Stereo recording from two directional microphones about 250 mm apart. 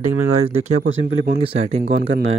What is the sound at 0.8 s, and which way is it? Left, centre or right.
Speech, right.